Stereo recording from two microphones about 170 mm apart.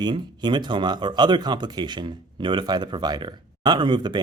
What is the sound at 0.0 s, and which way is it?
Speech, 25° right (ahead or behind).